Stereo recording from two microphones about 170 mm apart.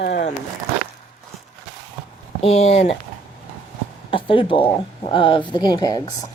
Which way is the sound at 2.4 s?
40° left (ahead or behind).